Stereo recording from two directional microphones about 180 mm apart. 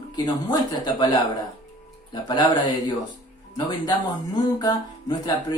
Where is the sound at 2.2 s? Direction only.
25° left (ahead or behind).